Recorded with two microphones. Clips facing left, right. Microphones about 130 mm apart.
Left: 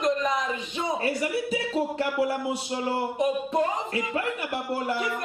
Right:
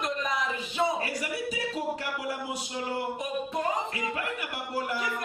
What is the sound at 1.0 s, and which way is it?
A man's voice, 25° left (ahead or behind).